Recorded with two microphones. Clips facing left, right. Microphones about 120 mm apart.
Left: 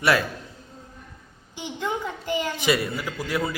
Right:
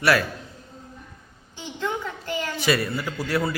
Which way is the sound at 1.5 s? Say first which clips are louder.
Even; 15° left (ahead or behind).